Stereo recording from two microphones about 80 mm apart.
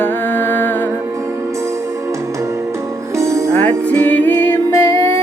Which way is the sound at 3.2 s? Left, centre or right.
Right.